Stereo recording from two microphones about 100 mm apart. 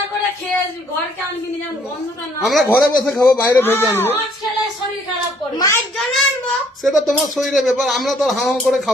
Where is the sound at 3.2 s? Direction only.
25° left (ahead or behind).